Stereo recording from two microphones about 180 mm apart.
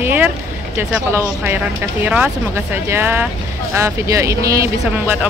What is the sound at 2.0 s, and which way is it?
Speech, 10° right (ahead or behind).